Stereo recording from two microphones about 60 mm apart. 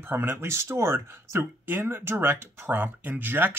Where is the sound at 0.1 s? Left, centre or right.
Right.